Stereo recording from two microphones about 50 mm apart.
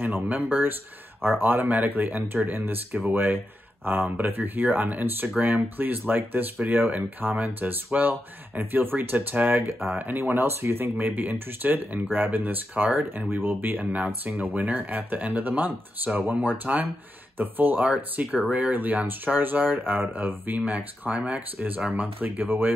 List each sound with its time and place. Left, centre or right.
0.0 s speech: right
9.6 s speech: right
9.9 s speech: right
21.5 s speech: right